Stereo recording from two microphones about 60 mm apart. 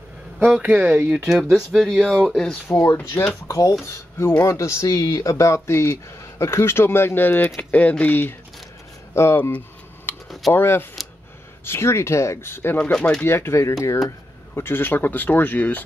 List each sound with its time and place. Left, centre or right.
0.4 s speech: right
1.2 s speech: centre
2.7 s speech: left
3.4 s speech: left
4.4 s speech: left
9.1 s speech: left
10.1 s typing: left
10.5 s speech: left
12.9 s speech: centre
13.2 s speech: left